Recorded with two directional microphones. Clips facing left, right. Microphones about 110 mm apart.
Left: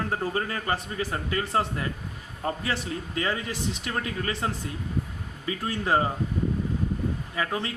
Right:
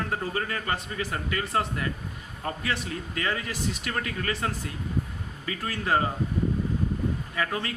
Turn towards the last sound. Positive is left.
turn(degrees=25)  # may be behind; listen again after turning